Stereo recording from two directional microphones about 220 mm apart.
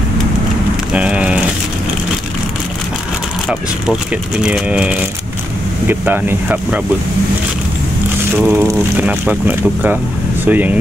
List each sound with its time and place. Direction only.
0.9 s a sound: 5° right (ahead or behind)
3.4 s speech: 5° right (ahead or behind)
8.4 s speech: 5° right (ahead or behind)